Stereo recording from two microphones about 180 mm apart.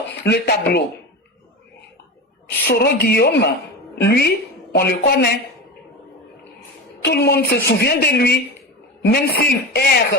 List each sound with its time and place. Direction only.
0.3 s a woman's voice: 65° left (ahead or behind)
2.6 s a woman's voice: 60° left (ahead or behind)
7.0 s a woman's voice: 65° left (ahead or behind)